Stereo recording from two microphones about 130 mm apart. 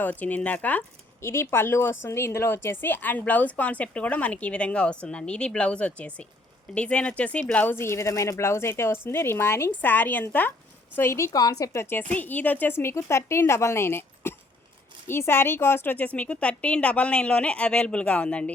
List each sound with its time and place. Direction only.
0.0 s a woman's voice: 15° left (ahead or behind)